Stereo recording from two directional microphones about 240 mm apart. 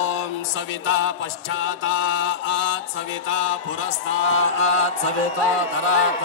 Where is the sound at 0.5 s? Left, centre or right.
Left.